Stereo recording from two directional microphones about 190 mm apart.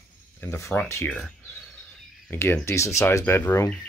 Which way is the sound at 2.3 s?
10° left (ahead or behind).